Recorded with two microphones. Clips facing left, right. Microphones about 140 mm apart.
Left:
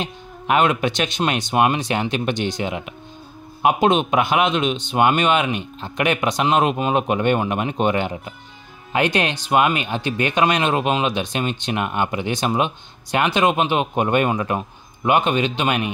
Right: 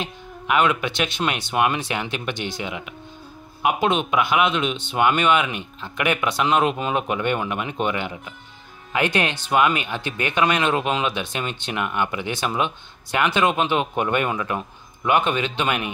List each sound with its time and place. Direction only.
0.0 s speech: 35° left (ahead or behind)
3.9 s speech: 25° left (ahead or behind)
15.0 s speech: 20° left (ahead or behind)